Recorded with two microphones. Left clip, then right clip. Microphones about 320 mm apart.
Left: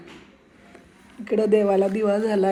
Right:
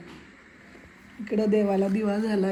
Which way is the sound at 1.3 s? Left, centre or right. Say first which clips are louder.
Left 5 dB; left.